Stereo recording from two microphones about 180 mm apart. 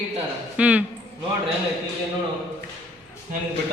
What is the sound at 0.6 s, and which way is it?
Speech, 10° right (ahead or behind).